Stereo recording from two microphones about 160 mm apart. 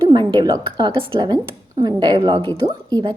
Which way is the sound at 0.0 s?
30° right (ahead or behind).